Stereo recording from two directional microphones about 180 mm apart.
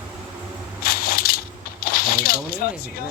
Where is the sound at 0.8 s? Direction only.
55° left (ahead or behind).